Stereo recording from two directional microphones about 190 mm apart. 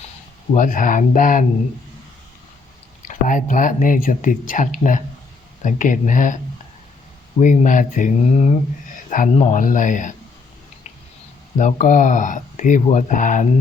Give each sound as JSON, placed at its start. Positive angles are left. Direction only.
{"t": 0.5, "sound": "speech", "side_deg": 45}
{"t": 3.0, "sound": "speech", "side_deg": 40}
{"t": 7.3, "sound": "speech", "side_deg": 40}
{"t": 11.5, "sound": "speech", "side_deg": 40}